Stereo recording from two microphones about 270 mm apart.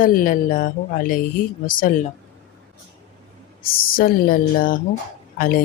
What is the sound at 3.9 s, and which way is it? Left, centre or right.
A woman's voice, left.